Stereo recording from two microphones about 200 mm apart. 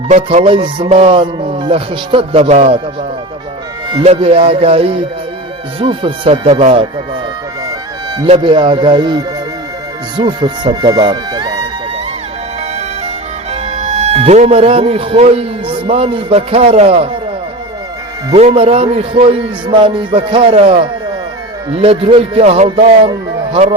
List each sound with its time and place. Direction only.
0.1 s a man's voice: 30° right (ahead or behind)
3.8 s a man's voice: 25° right (ahead or behind)
8.2 s a man's voice: 25° right (ahead or behind)
13.5 s speech: 35° right (ahead or behind)
18.3 s a man's voice: 30° right (ahead or behind)